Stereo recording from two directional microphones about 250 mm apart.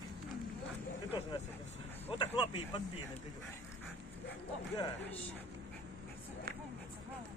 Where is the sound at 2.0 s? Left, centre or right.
Centre.